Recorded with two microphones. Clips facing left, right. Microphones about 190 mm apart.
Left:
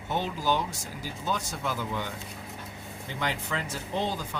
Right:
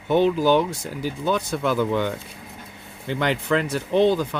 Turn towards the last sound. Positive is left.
turn(degrees=-70)  # may be behind; listen again after turning